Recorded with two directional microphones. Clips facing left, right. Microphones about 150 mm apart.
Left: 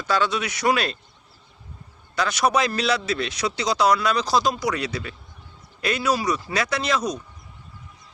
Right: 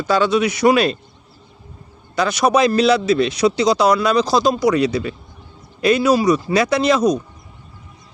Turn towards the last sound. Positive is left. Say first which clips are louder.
# right 9 dB
turn(degrees=-20)  # may be behind; listen again after turning